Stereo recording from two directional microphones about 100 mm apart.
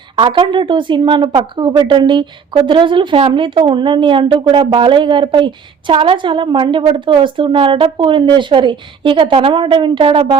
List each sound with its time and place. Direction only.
0.2 s a woman's voice: 55° right (ahead or behind)
3.2 s a woman's voice: 65° right (ahead or behind)